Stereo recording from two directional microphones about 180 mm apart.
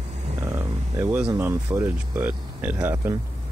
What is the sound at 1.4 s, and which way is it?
Speech, 15° right (ahead or behind).